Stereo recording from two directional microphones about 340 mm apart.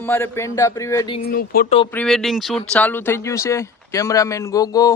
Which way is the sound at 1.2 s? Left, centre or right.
Left.